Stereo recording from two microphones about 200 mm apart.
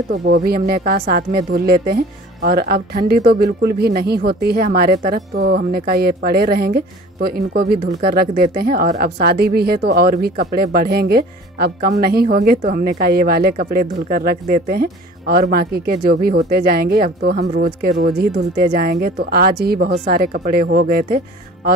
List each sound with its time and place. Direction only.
0.3 s a woman's voice: 50° right (ahead or behind)